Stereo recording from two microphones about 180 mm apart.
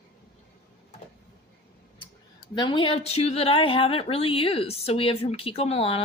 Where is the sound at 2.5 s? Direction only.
25° left (ahead or behind).